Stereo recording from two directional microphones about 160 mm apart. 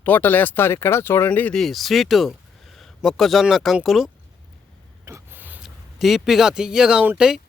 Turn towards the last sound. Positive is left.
turn(degrees=-5)  # may be behind; listen again after turning